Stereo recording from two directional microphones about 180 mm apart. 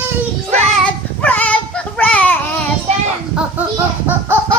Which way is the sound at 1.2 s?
10° left (ahead or behind).